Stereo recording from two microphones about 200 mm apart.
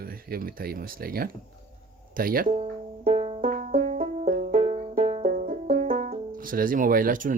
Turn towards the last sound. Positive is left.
turn(degrees=-45)  # may be behind; listen again after turning